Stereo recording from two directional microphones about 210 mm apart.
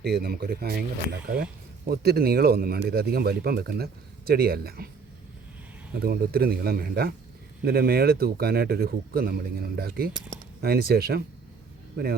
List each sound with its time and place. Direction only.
0.0 s a man's voice: 50° right (ahead or behind)
5.9 s a man's voice: 45° right (ahead or behind)